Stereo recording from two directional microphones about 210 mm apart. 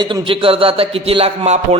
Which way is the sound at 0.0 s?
25° right (ahead or behind).